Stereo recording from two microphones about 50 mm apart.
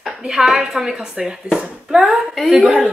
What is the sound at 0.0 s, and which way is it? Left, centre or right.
Speech, centre.